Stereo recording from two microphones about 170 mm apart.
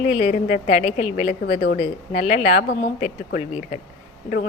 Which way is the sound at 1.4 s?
65° left (ahead or behind).